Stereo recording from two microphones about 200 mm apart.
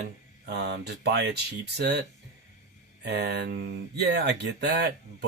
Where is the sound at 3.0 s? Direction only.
55° right (ahead or behind).